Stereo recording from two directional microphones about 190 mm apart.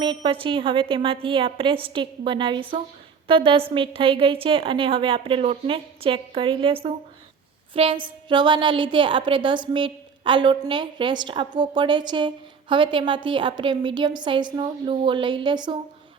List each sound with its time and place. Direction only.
0.0 s a woman's voice: 25° right (ahead or behind)